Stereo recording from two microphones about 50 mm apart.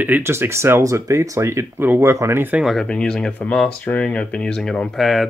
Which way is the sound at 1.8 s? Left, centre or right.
Right.